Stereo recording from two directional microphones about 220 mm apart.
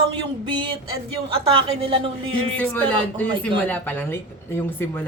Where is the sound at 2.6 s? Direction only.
5° left (ahead or behind).